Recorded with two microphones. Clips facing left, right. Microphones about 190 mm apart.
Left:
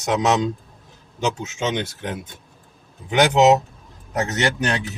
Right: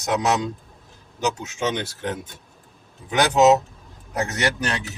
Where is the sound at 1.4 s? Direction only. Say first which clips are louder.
Left 1 dB; 20° left (ahead or behind).